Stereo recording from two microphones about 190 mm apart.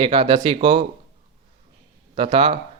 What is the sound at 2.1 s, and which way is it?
Speech, 30° right (ahead or behind).